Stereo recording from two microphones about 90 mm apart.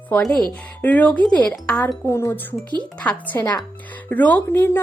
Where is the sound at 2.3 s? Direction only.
20° left (ahead or behind).